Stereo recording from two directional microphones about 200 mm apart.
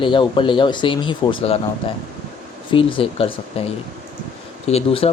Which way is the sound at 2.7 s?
25° left (ahead or behind).